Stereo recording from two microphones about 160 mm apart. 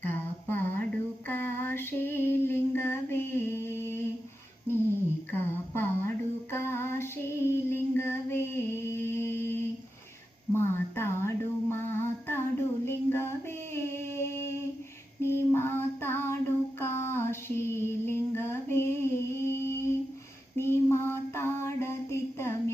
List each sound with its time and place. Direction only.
0.0 s a sound: 10° left (ahead or behind)
1.3 s female singing: 15° left (ahead or behind)
5.3 s female singing: 15° left (ahead or behind)
8.9 s music: 15° left (ahead or behind)
10.5 s a sound: 15° left (ahead or behind)
13.7 s music: 15° left (ahead or behind)
15.2 s female singing: 15° left (ahead or behind)
16.8 s a sound: 15° left (ahead or behind)
20.6 s mantra: 15° left (ahead or behind)